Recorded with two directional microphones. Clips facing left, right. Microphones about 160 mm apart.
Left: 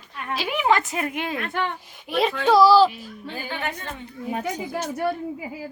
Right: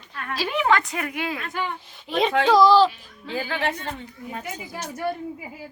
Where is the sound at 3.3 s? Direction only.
90° right.